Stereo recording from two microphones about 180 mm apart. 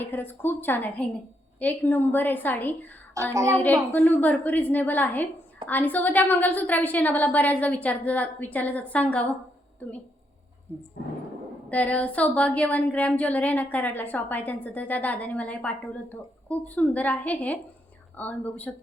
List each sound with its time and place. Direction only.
0.0 s speech: 10° left (ahead or behind)
3.2 s a woman's voice: 15° right (ahead or behind)
3.9 s speech: 10° left (ahead or behind)
11.7 s speech: 10° left (ahead or behind)